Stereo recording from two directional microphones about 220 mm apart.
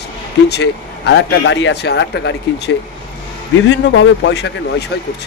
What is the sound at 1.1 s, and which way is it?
Speech, 55° left (ahead or behind).